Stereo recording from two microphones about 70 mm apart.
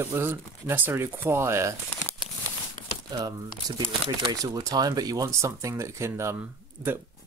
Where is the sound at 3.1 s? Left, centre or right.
Right.